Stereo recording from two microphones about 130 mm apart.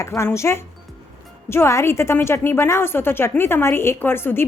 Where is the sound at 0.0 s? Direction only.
20° left (ahead or behind).